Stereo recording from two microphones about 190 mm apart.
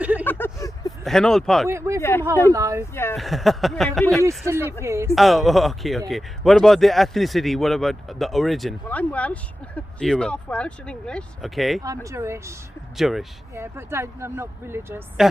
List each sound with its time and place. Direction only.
0.0 s vehicle: 10° right (ahead or behind)
0.3 s vehicle: 10° left (ahead or behind)
1.0 s speech: centre (ahead or behind)
1.6 s speech: 15° right (ahead or behind)
2.0 s speech: 15° left (ahead or behind)
2.5 s speech: 15° right (ahead or behind)
2.9 s speech: 10° left (ahead or behind)
3.2 s speech: centre (ahead or behind)
4.3 s speech: 15° right (ahead or behind)
5.1 s speech: centre (ahead or behind)
12.0 s speech: 15° right (ahead or behind)
13.0 s speech: centre (ahead or behind)
13.6 s speech: 15° right (ahead or behind)